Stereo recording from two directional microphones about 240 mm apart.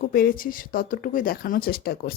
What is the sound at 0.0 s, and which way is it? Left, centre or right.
Speech, left.